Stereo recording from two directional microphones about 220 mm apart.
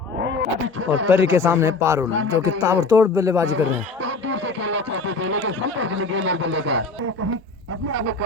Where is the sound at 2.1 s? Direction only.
60° right (ahead or behind).